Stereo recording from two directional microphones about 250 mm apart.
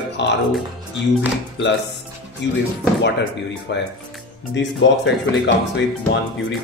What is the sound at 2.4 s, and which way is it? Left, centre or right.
Speech, left.